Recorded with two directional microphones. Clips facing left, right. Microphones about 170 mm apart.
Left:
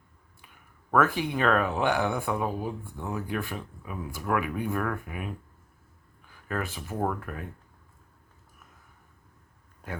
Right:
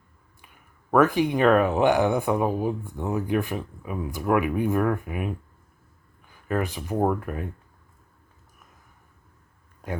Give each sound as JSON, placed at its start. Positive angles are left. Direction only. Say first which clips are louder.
{"t": 0.9, "sound": "speech", "louder": "right 5 dB", "side_deg": -20}
{"t": 6.5, "sound": "speech", "louder": "right 6 dB", "side_deg": -15}